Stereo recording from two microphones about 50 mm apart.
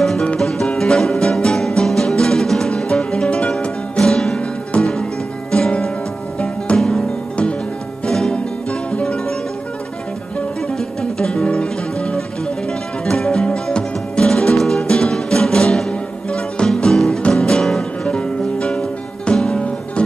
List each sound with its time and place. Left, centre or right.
0.4 s music: centre
4.7 s music: left
8.1 s music: centre
11.0 s music: centre